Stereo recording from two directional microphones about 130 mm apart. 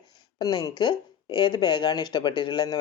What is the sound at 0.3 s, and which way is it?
Speech, 30° left (ahead or behind).